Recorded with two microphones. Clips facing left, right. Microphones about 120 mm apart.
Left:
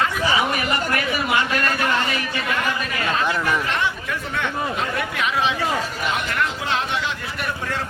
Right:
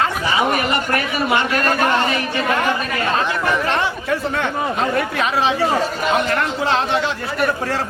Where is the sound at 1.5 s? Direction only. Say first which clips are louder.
Right 5 dB; 45° right (ahead or behind).